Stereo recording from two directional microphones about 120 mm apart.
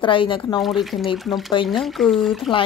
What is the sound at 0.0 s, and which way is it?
Speech, 45° left (ahead or behind).